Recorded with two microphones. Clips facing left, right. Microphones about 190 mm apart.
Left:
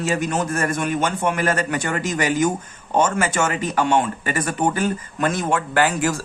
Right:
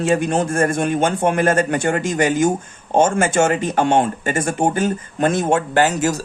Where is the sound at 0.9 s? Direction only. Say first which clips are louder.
Right 4 dB; 55° right (ahead or behind).